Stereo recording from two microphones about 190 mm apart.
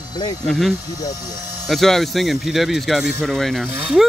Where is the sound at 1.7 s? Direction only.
Centre (ahead or behind).